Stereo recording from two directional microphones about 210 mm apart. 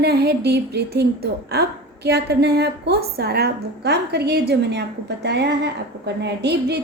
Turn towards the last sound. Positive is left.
turn(degrees=-50)  # may be behind; listen again after turning